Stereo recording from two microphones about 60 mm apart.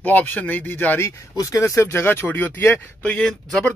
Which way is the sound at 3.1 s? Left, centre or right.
Centre.